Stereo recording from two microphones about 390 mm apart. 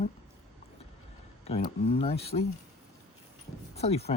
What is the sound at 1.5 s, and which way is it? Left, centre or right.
Speech, centre.